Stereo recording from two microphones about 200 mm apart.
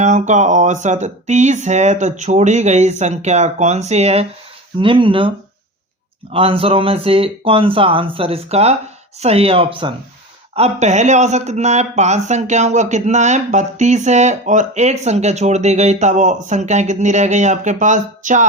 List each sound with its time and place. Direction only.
0.0 s speech: 35° right (ahead or behind)
6.3 s speech: 25° right (ahead or behind)